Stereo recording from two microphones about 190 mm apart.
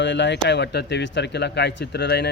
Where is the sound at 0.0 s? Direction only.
70° left (ahead or behind).